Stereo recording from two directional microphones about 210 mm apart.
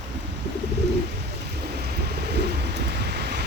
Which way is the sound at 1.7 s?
50° right (ahead or behind).